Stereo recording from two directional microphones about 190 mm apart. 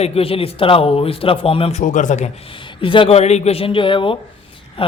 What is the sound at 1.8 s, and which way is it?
Speech, 40° left (ahead or behind).